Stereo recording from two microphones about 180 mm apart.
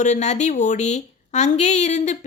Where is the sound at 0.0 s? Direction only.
40° left (ahead or behind).